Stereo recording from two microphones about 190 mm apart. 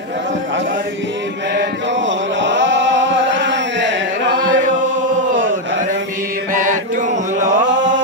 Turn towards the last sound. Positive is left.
turn(degrees=-75)  # may be behind; listen again after turning